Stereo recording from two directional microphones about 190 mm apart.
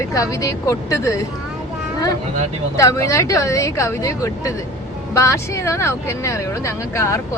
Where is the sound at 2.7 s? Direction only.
15° left (ahead or behind).